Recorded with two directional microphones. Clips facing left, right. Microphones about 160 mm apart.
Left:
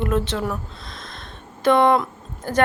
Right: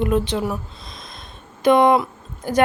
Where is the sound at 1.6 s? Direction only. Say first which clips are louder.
Right 2 dB; 15° right (ahead or behind).